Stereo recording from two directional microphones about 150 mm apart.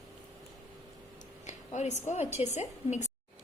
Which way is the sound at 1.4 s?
50° left (ahead or behind).